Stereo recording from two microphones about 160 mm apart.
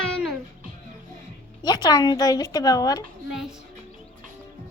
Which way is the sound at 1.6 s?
25° left (ahead or behind).